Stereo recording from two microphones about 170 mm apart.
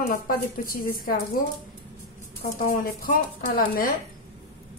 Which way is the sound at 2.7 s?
55° left (ahead or behind).